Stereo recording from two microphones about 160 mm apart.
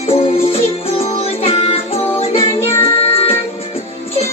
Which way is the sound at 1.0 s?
40° left (ahead or behind).